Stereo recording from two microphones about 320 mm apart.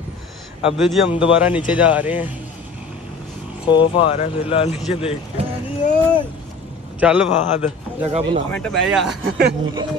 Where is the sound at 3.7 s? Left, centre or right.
Centre.